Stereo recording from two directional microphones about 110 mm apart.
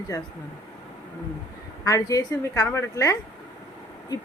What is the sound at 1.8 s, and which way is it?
A woman's voice, 30° left (ahead or behind).